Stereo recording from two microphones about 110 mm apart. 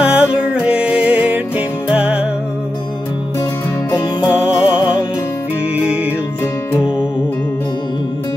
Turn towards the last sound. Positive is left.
turn(degrees=-10)  # may be behind; listen again after turning